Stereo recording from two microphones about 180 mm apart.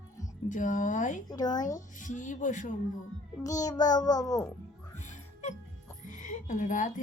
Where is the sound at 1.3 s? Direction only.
20° left (ahead or behind).